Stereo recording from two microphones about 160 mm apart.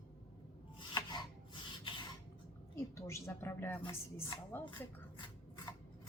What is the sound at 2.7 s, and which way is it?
A woman's voice, 20° left (ahead or behind).